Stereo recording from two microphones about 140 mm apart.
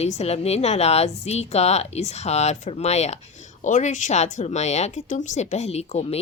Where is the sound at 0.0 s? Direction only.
50° left (ahead or behind).